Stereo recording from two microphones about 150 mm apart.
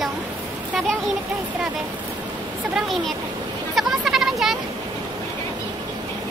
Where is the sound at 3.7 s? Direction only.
Centre (ahead or behind).